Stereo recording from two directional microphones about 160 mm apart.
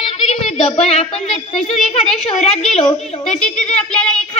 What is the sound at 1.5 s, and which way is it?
Speech, 5° left (ahead or behind).